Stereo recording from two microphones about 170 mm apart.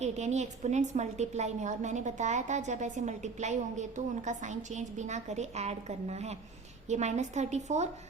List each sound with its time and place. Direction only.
0.0 s a woman's voice: 40° right (ahead or behind)